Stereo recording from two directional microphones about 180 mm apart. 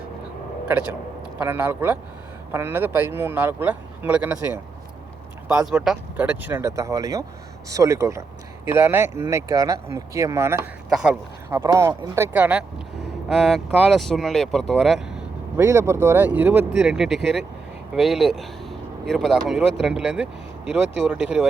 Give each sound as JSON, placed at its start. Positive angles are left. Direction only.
{"t": 1.4, "sound": "speech", "side_deg": -10}
{"t": 5.5, "sound": "speech", "side_deg": -5}
{"t": 10.8, "sound": "speech", "side_deg": -5}
{"t": 11.5, "sound": "speech", "side_deg": -15}
{"t": 13.2, "sound": "speech", "side_deg": 0}
{"t": 15.5, "sound": "speech", "side_deg": -15}